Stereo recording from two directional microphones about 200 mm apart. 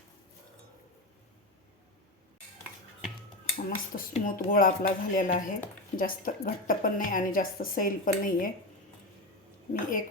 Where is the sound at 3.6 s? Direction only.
45° left (ahead or behind).